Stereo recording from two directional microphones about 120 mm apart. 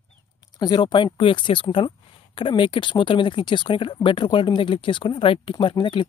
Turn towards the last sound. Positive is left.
turn(degrees=45)  # may be behind; listen again after turning